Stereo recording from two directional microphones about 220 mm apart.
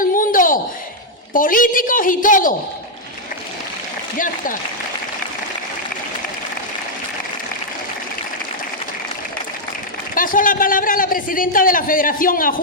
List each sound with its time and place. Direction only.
0.0 s a sound: 40° left (ahead or behind)
1.3 s a man's voice: 40° left (ahead or behind)
10.2 s a man's voice: 40° left (ahead or behind)